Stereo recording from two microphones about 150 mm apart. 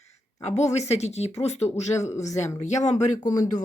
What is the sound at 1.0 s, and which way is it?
Speech, 45° left (ahead or behind).